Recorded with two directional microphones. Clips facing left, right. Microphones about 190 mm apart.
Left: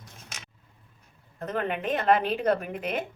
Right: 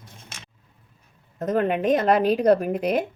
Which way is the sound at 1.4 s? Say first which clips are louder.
Right 8 dB; 40° right (ahead or behind).